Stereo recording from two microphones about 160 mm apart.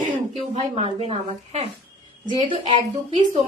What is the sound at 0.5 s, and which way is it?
A woman's voice, 35° right (ahead or behind).